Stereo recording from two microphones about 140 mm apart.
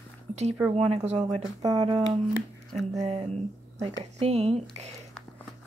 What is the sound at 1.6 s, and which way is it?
Speech, 30° right (ahead or behind).